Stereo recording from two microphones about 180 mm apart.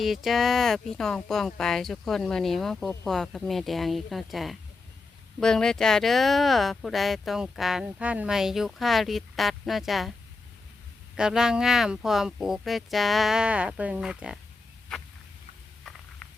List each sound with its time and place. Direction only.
0.0 s speech: centre (ahead or behind)
11.2 s speech: 5° right (ahead or behind)
15.8 s patter: centre (ahead or behind)